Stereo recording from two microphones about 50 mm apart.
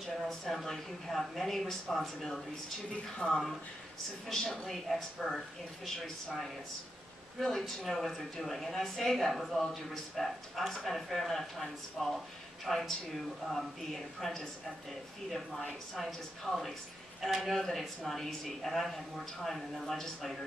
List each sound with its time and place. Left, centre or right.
0.0 s a woman's voice: centre
3.2 s speech: centre
4.3 s a woman's voice: centre
7.3 s a woman's voice: centre
16.0 s a woman's voice: centre